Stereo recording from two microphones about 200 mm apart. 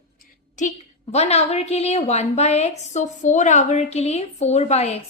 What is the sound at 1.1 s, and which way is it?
A woman's voice, 30° left (ahead or behind).